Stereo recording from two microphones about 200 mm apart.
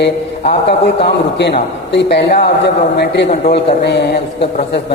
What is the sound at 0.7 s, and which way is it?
A man's voice, 55° left (ahead or behind).